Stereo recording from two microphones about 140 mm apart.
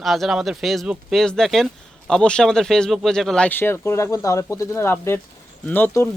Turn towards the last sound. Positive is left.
turn(degrees=15)  # may be behind; listen again after turning